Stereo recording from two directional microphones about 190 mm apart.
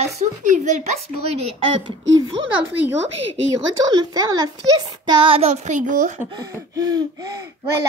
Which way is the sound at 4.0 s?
20° right (ahead or behind).